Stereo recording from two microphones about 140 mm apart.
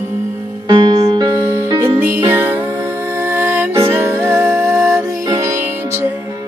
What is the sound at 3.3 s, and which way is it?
Music, 15° right (ahead or behind).